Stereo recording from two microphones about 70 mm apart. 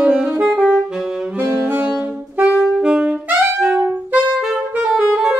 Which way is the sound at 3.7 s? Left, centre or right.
Right.